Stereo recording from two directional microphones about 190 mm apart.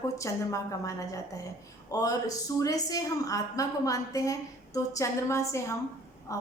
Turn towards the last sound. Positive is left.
turn(degrees=15)  # may be behind; listen again after turning